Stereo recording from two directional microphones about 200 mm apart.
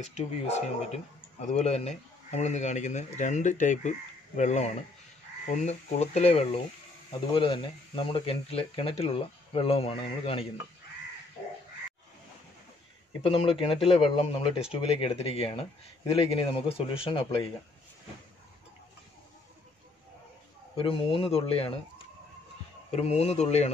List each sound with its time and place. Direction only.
0.0 s speech: 35° left (ahead or behind)
13.2 s speech: 30° left (ahead or behind)
20.7 s speech: 25° left (ahead or behind)
22.8 s speech: 30° left (ahead or behind)